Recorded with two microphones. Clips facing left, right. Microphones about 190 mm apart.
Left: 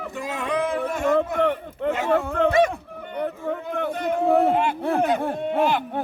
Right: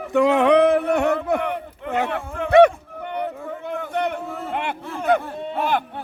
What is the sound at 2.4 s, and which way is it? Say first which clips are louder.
Speech: right 8 dB; 65° right (ahead or behind).